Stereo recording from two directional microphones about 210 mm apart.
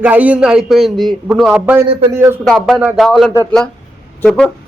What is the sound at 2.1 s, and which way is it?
Speech, 15° right (ahead or behind).